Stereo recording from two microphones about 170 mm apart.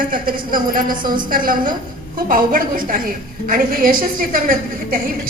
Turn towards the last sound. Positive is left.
turn(degrees=-55)  # may be behind; listen again after turning